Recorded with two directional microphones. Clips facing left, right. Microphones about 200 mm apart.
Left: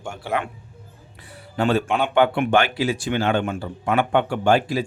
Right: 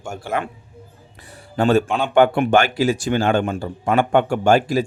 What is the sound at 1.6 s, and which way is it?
Speech, 45° right (ahead or behind).